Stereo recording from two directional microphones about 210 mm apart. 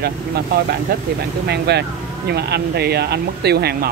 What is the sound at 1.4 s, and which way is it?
Speech, 50° right (ahead or behind).